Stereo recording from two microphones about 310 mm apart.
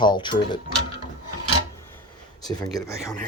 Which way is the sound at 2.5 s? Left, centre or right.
Centre.